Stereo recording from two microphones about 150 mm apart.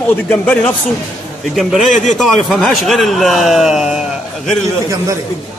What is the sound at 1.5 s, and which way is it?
A man's voice, centre (ahead or behind).